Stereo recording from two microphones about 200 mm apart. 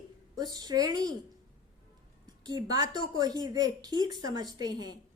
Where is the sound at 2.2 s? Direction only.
20° right (ahead or behind).